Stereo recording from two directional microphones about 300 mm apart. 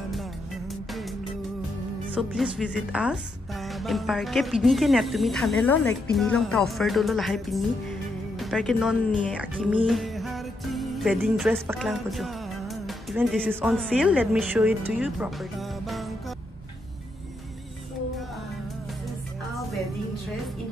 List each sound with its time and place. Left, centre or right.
2.1 s speech: centre